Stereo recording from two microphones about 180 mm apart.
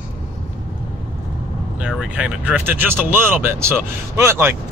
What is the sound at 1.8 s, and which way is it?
Speech, 5° right (ahead or behind).